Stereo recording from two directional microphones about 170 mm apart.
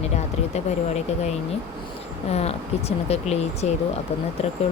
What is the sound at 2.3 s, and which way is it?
Speech, 35° left (ahead or behind).